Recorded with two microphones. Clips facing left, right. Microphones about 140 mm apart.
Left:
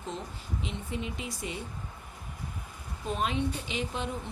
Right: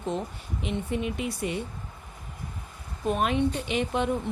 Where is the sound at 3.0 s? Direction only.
60° right (ahead or behind).